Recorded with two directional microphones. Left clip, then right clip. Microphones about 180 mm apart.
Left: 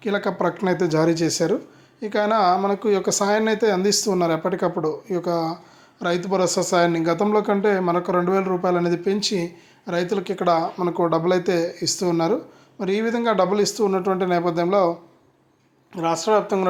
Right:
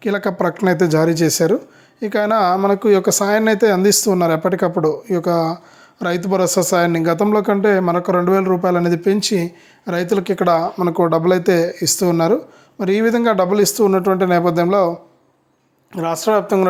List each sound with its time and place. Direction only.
0.0 s speech: 45° right (ahead or behind)